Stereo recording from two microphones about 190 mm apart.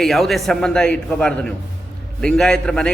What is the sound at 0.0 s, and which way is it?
A man's voice, centre (ahead or behind).